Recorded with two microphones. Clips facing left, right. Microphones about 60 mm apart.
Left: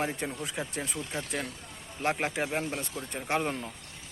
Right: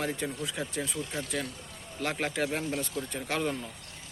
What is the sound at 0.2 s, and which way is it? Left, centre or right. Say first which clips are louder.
Speech: right 1 dB; left.